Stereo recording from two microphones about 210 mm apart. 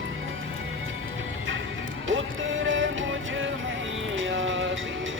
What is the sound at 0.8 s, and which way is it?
Music, 70° right (ahead or behind).